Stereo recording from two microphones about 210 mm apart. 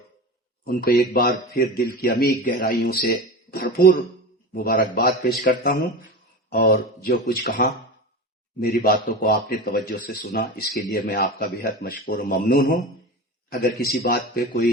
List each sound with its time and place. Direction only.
0.6 s a man's voice: 45° left (ahead or behind)